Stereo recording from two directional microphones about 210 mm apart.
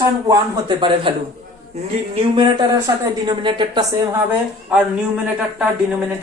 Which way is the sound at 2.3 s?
20° right (ahead or behind).